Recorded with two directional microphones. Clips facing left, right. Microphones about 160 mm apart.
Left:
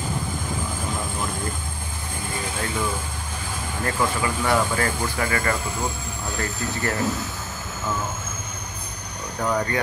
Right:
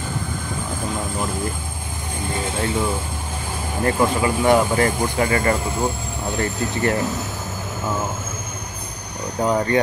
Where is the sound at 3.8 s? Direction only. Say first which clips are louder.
Right 6 dB; 20° right (ahead or behind).